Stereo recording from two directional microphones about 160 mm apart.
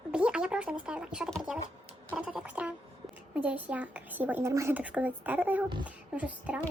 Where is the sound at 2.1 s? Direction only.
5° right (ahead or behind).